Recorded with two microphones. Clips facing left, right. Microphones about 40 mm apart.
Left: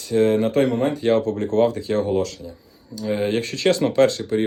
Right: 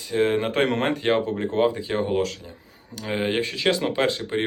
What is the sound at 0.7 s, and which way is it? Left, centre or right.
Speech, right.